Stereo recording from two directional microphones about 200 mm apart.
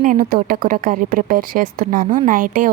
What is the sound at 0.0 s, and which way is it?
A woman's voice, 40° right (ahead or behind).